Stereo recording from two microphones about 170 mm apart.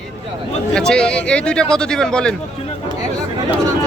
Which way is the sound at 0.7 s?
5° left (ahead or behind).